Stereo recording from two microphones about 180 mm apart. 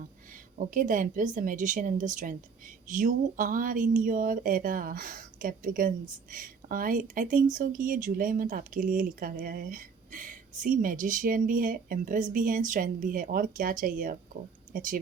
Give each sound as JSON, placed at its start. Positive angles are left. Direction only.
{"t": 0.6, "sound": "speech", "side_deg": -45}